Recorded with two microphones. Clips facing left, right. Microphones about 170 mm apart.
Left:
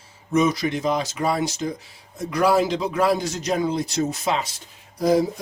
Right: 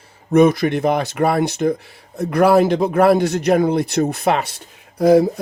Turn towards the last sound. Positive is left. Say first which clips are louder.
# right 7 dB
turn(degrees=-60)  # may be behind; listen again after turning